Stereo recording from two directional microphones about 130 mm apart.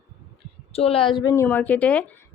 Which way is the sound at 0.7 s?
50° left (ahead or behind).